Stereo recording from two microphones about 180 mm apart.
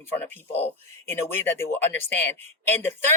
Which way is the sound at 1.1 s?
15° left (ahead or behind).